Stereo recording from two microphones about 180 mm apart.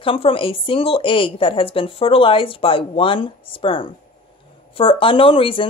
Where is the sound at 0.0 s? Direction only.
30° left (ahead or behind).